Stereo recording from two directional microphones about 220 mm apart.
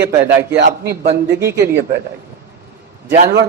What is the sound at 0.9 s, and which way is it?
Speech, 45° right (ahead or behind).